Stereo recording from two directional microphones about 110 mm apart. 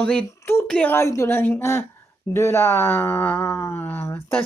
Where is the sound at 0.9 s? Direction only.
25° left (ahead or behind).